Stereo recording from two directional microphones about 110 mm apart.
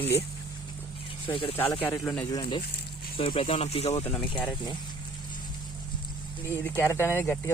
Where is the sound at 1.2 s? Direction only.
55° left (ahead or behind).